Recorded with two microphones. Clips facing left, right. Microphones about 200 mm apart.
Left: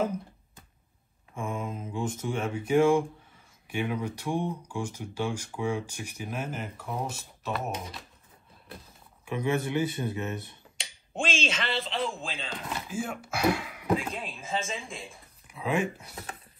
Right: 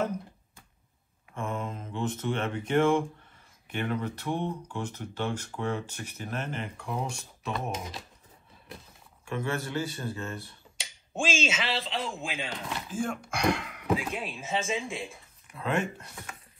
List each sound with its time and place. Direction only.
1.3 s speech: 10° left (ahead or behind)
9.2 s speech: 15° left (ahead or behind)
10.8 s speech: 5° right (ahead or behind)
13.9 s speech: 5° right (ahead or behind)